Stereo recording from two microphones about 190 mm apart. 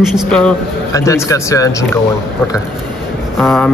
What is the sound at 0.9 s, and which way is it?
Speech, 15° left (ahead or behind).